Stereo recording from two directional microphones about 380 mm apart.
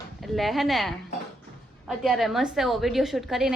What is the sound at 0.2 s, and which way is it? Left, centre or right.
Speech, centre.